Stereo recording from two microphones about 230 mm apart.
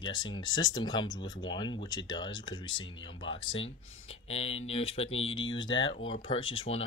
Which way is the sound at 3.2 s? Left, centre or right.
Left.